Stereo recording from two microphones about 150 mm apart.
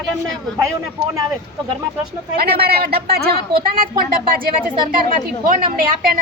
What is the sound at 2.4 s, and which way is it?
A woman's voice, 90° right.